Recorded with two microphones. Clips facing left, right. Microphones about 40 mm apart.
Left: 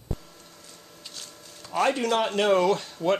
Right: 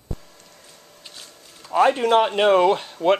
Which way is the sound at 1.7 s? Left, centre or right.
Centre.